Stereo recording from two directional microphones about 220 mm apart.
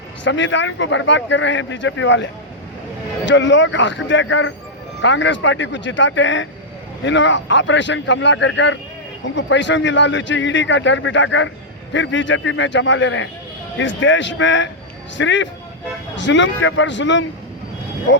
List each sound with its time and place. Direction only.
0.3 s speech: 55° left (ahead or behind)